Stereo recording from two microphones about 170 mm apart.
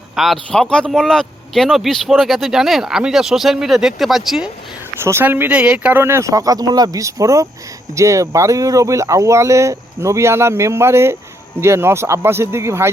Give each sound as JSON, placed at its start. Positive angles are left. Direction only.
{"t": 0.2, "sound": "speech", "side_deg": 0}
{"t": 5.0, "sound": "speech", "side_deg": -15}